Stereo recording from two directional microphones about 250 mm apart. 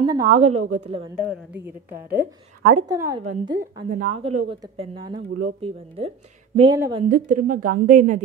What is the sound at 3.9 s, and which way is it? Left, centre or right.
Speech, right.